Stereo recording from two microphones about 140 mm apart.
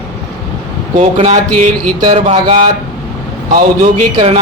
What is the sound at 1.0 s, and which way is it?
Speech, 55° right (ahead or behind).